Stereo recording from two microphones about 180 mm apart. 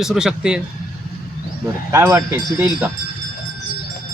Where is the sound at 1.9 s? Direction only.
15° right (ahead or behind).